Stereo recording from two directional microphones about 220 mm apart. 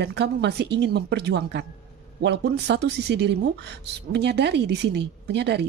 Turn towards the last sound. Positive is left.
turn(degrees=-50)  # may be behind; listen again after turning